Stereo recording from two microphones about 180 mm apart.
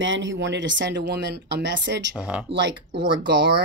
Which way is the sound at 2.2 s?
5° right (ahead or behind).